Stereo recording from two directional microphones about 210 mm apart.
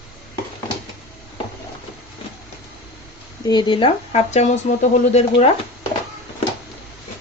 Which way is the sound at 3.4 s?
20° left (ahead or behind).